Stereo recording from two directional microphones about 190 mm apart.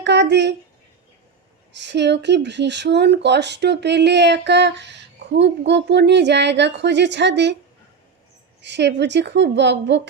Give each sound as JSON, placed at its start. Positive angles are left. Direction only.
{"t": 0.0, "sound": "speech", "side_deg": -65}
{"t": 1.7, "sound": "speech", "side_deg": -65}
{"t": 8.6, "sound": "a woman's voice", "side_deg": -65}